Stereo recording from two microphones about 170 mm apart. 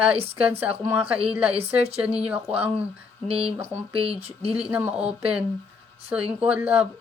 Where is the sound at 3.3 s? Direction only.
35° right (ahead or behind).